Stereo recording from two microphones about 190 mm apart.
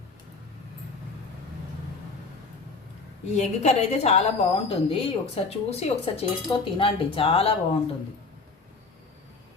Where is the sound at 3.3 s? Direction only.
35° left (ahead or behind).